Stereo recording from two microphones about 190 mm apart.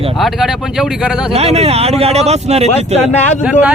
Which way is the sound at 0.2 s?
Centre (ahead or behind).